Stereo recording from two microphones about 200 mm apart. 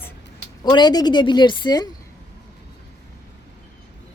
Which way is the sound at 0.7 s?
20° left (ahead or behind).